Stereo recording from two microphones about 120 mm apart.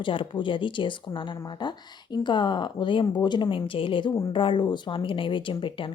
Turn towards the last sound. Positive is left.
turn(degrees=45)  # may be behind; listen again after turning